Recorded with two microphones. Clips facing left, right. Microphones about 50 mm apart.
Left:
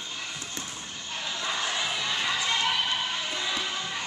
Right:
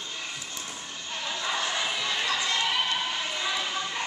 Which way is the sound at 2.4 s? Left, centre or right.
Left.